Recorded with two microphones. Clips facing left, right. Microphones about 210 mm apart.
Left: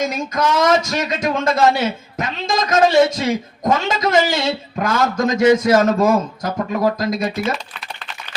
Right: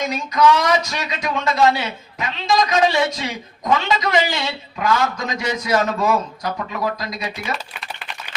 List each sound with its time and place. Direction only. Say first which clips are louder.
0.0 s a man's voice: right 2 dB; 45° left (ahead or behind)